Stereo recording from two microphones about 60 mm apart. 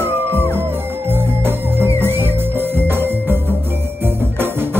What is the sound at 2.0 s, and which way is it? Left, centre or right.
Music, right.